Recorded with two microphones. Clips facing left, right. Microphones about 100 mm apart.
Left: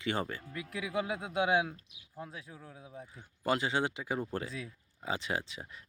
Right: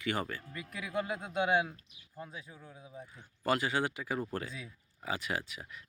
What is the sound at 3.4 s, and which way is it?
Speech, 20° left (ahead or behind).